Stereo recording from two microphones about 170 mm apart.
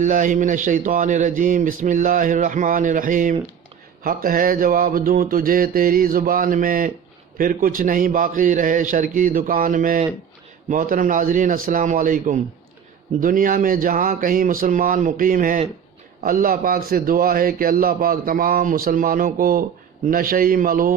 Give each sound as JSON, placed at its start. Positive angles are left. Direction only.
{"t": 0.0, "sound": "a man's voice", "side_deg": -50}